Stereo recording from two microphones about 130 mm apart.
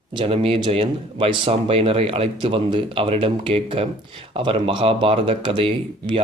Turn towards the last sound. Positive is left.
turn(degrees=-45)  # may be behind; listen again after turning